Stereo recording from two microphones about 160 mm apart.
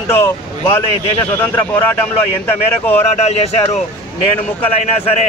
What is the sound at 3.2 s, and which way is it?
Speech, 40° left (ahead or behind).